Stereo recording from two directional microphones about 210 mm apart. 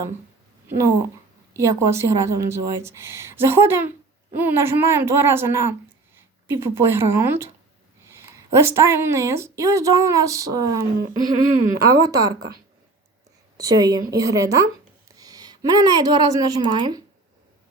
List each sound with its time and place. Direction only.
1.5 s a woman's voice: 15° right (ahead or behind)
13.6 s a woman's voice: 15° right (ahead or behind)